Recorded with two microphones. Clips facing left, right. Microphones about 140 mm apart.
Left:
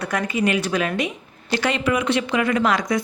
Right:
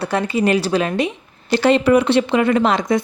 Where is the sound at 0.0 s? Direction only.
30° right (ahead or behind).